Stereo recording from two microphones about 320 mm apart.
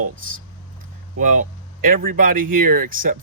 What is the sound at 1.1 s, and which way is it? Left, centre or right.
Speech, right.